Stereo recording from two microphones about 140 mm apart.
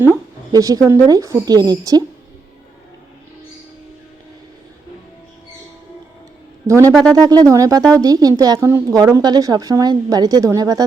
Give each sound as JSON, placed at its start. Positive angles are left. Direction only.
{"t": 0.5, "sound": "a woman's voice", "side_deg": -25}
{"t": 6.7, "sound": "a woman's voice", "side_deg": -20}